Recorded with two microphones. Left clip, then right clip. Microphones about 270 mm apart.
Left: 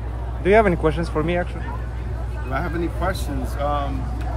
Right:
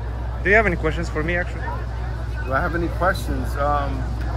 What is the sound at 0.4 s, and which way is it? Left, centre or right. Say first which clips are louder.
Speech: left 1 dB; centre.